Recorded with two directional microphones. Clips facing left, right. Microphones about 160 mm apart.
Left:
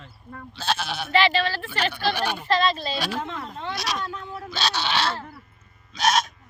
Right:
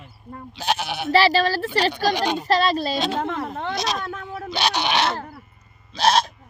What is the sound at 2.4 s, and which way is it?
Speech, 40° right (ahead or behind).